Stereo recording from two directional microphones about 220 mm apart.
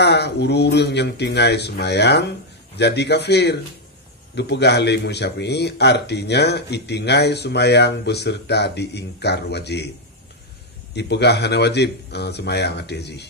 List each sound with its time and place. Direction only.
0.0 s speech: 50° left (ahead or behind)
11.0 s speech: 50° left (ahead or behind)